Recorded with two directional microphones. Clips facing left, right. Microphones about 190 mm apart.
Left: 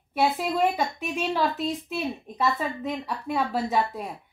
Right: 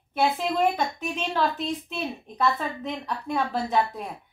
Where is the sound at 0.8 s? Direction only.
10° left (ahead or behind).